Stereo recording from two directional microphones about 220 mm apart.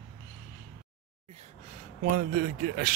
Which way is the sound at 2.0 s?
40° right (ahead or behind).